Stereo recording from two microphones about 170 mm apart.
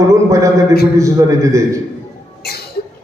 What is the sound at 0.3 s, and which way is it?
A man's voice, 20° right (ahead or behind).